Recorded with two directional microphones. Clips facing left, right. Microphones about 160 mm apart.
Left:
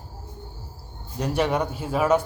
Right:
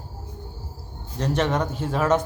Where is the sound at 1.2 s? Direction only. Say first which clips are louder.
Even; 10° left (ahead or behind).